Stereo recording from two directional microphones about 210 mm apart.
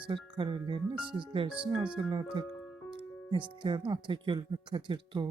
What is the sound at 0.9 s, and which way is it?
Speech, 5° right (ahead or behind).